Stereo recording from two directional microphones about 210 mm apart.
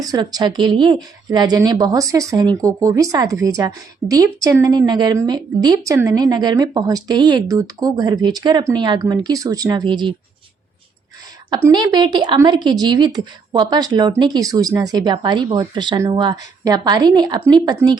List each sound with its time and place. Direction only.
0.0 s a woman's voice: 20° right (ahead or behind)
11.5 s a woman's voice: 20° right (ahead or behind)